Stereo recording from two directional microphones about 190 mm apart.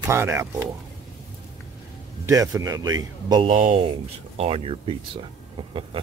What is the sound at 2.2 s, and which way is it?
Speech, 20° right (ahead or behind).